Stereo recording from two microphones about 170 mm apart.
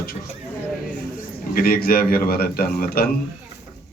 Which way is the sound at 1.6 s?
60° left (ahead or behind).